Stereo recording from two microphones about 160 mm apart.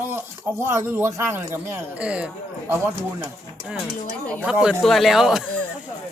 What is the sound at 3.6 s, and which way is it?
Speech, 5° left (ahead or behind).